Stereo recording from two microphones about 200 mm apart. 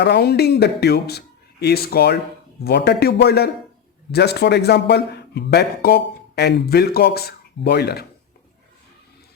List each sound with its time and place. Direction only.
0.0 s a man's voice: 55° left (ahead or behind)